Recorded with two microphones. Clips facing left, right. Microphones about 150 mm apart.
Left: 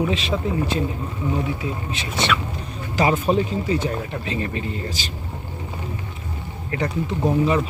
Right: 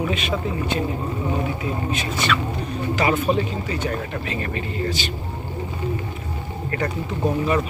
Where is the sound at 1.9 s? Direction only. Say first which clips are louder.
Even; 25° left (ahead or behind).